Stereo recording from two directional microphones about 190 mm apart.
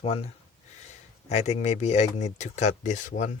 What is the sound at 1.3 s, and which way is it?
Speech, 35° left (ahead or behind).